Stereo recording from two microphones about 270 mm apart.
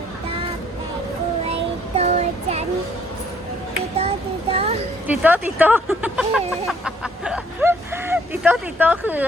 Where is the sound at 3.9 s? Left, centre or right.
Right.